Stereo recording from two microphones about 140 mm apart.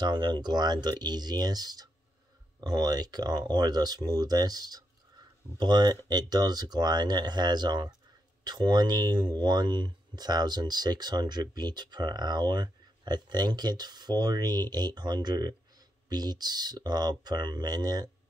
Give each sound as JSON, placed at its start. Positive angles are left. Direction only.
{"t": 0.0, "sound": "speech", "side_deg": -30}